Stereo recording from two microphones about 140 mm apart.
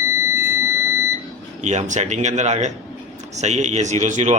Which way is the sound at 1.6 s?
55° right (ahead or behind).